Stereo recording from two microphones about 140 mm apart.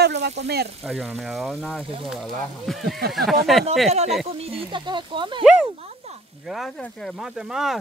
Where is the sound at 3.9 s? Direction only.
50° right (ahead or behind).